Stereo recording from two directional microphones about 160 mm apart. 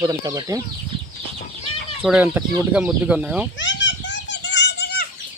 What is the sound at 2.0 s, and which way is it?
Speech, 5° right (ahead or behind).